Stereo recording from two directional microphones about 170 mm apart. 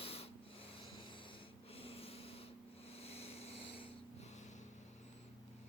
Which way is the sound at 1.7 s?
35° left (ahead or behind).